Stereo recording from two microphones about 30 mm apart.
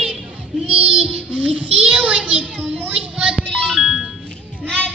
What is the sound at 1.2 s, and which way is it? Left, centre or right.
Speech, right.